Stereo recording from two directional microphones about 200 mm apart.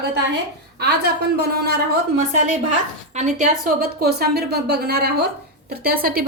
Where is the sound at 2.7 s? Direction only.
35° right (ahead or behind).